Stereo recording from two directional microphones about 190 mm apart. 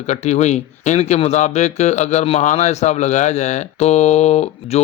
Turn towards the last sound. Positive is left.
turn(degrees=35)  # may be behind; listen again after turning